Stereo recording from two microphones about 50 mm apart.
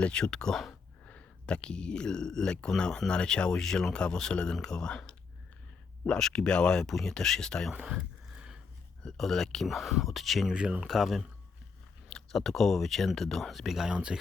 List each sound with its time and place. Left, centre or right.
0.0 s speech: centre
1.0 s speech: left
7.7 s a sound: centre
9.0 s speech: centre
10.5 s speech: centre
10.8 s speech: centre
12.0 s speech: centre
13.9 s speech: centre